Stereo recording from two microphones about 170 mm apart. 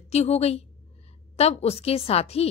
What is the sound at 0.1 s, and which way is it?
A woman's voice, 40° left (ahead or behind).